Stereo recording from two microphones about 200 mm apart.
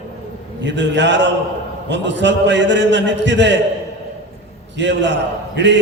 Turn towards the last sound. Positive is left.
turn(degrees=-65)  # may be behind; listen again after turning